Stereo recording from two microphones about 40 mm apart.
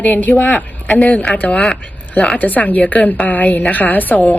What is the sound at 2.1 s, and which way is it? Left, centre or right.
Speech, left.